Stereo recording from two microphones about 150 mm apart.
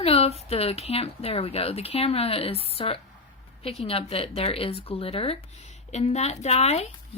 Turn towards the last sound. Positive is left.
turn(degrees=45)  # may be behind; listen again after turning